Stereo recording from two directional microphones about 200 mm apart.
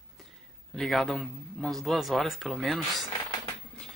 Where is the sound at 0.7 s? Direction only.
Centre (ahead or behind).